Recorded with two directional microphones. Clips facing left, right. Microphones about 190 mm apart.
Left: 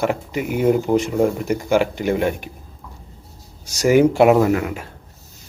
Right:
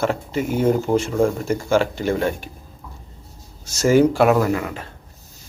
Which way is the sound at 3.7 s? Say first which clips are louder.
Left 1 dB; 15° left (ahead or behind).